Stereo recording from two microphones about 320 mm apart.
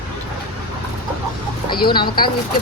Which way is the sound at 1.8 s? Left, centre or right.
Left.